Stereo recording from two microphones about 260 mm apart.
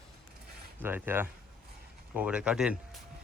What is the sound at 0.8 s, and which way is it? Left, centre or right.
Speech, centre.